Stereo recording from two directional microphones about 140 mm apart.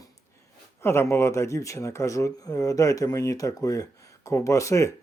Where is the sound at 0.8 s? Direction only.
20° left (ahead or behind).